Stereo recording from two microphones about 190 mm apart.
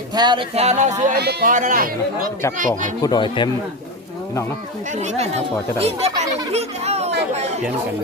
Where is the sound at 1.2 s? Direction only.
60° right (ahead or behind).